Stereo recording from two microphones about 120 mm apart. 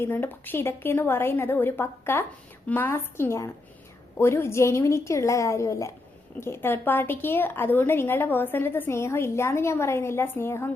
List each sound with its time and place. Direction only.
0.0 s a woman's voice: 15° left (ahead or behind)